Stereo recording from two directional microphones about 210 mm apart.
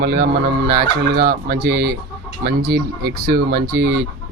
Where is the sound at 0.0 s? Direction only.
45° right (ahead or behind).